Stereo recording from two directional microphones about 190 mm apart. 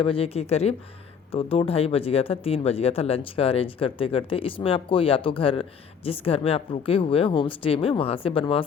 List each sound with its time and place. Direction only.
0.0 s speech: 30° left (ahead or behind)